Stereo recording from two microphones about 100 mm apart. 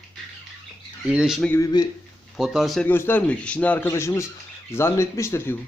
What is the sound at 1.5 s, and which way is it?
Speech, 30° left (ahead or behind).